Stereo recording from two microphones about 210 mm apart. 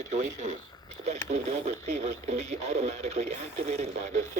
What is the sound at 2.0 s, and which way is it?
Speech, 30° right (ahead or behind).